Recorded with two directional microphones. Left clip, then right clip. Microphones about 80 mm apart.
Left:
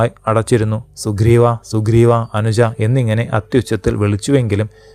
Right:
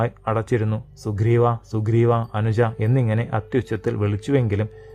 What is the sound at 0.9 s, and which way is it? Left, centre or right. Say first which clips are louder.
Speech: left 8 dB; left.